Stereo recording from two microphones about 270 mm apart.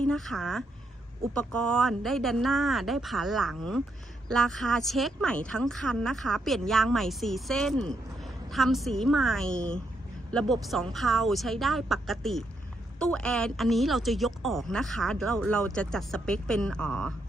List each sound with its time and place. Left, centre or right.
0.0 s speech: centre